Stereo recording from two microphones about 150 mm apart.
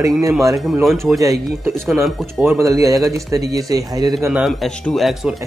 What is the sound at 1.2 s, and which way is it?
Speech, 20° right (ahead or behind).